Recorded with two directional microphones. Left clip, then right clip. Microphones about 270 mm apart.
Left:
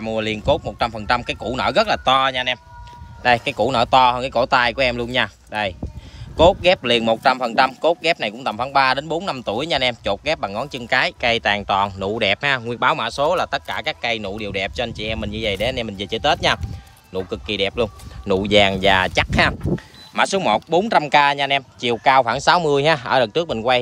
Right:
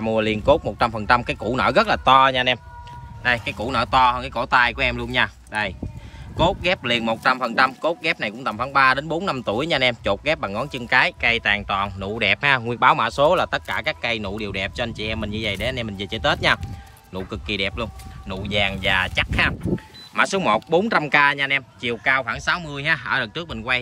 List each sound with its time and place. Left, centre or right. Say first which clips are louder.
0.0 s a man's voice: right 2 dB; centre
3.2 s a man's voice: left 5 dB; centre
18.2 s speech: left 8 dB; left
20.2 s speech: left 2 dB; centre